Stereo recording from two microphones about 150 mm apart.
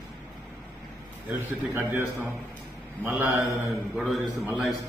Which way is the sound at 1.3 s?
15° right (ahead or behind).